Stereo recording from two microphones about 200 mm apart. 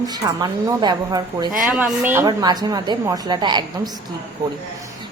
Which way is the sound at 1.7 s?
5° right (ahead or behind).